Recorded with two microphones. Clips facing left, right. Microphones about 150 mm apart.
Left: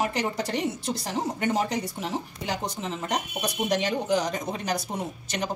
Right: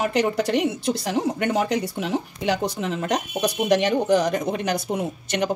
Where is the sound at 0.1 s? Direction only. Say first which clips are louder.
Right 7 dB; 70° right (ahead or behind).